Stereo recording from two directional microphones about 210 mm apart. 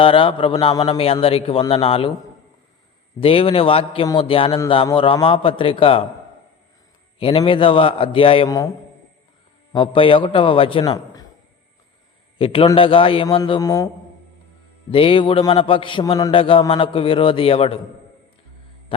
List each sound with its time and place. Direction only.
0.0 s a man's voice: 25° left (ahead or behind)
3.2 s a man's voice: 25° left (ahead or behind)
7.2 s a man's voice: 25° left (ahead or behind)
9.7 s a man's voice: 25° left (ahead or behind)
10.9 s a sound: 15° left (ahead or behind)
12.4 s a man's voice: 25° left (ahead or behind)
18.9 s a sound: 25° left (ahead or behind)